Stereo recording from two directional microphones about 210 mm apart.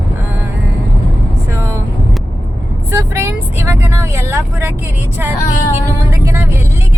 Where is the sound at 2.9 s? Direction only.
15° right (ahead or behind).